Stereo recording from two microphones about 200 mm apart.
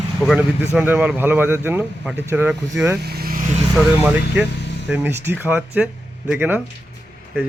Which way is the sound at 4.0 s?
10° right (ahead or behind).